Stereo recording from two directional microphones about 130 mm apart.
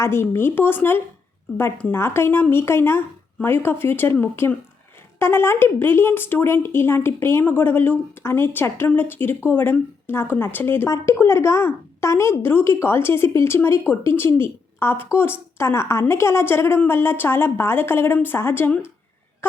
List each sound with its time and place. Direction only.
0.0 s speech: 20° left (ahead or behind)